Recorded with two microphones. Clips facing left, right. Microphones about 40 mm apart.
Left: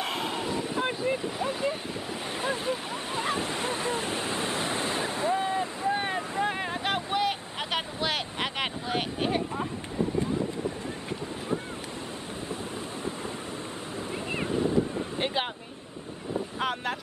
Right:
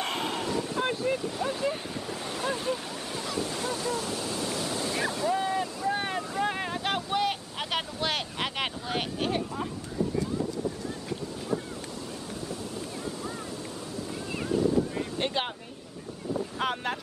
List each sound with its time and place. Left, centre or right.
0.0 s a sound: centre
0.5 s wind noise: centre
0.8 s speech: centre
3.2 s waves: left
5.9 s boat: centre
6.4 s vehicle: centre
14.3 s boat: left
15.1 s speech: centre
16.5 s speech: centre